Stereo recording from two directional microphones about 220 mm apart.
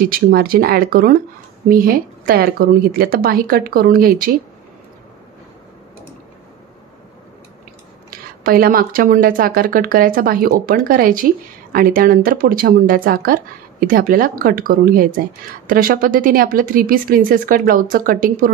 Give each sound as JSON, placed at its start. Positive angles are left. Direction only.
{"t": 0.1, "sound": "a woman's voice", "side_deg": -40}
{"t": 8.5, "sound": "a woman's voice", "side_deg": -40}